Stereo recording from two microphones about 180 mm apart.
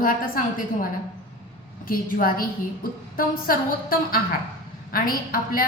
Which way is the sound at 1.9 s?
50° left (ahead or behind).